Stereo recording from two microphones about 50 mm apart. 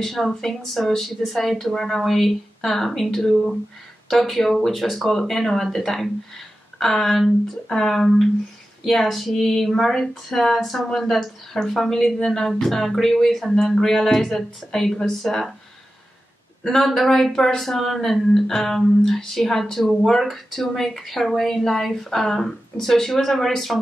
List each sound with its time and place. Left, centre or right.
0.0 s speech: centre
16.6 s speech: centre